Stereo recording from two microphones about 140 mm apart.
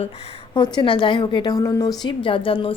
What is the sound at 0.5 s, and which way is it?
Speech, 35° left (ahead or behind).